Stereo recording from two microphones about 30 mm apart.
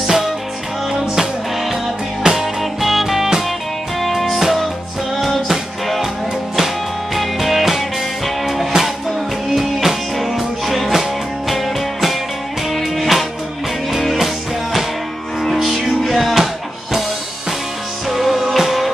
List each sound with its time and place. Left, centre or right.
0.0 s music: centre
2.2 s music: centre
4.4 s music: centre
7.2 s music: centre
8.7 s music: right
9.5 s music: centre
16.1 s music: centre
18.1 s music: centre